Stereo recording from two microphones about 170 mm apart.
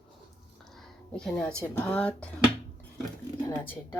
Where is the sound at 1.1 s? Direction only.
5° left (ahead or behind).